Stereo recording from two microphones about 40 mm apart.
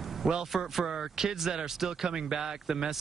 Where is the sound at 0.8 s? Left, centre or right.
Centre.